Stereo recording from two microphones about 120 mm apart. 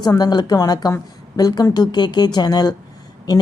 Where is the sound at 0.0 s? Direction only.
35° left (ahead or behind).